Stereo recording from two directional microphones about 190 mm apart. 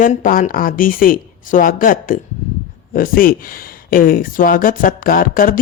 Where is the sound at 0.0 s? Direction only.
45° left (ahead or behind).